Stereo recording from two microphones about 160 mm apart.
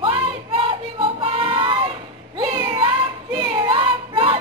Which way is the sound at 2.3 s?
25° right (ahead or behind).